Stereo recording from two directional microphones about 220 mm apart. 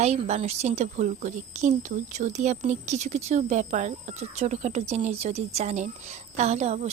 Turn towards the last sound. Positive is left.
turn(degrees=-30)  # may be behind; listen again after turning